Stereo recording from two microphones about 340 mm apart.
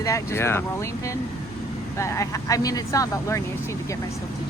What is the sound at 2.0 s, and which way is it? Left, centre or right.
Speech, centre.